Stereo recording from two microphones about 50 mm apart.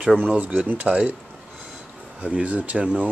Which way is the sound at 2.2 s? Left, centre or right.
Right.